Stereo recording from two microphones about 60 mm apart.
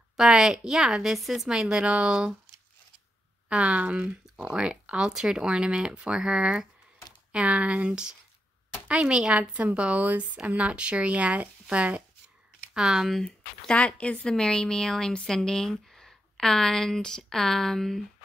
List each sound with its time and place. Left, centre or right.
0.2 s speech: centre
1.6 s speech: centre
3.4 s a woman's voice: centre
13.1 s a woman's voice: centre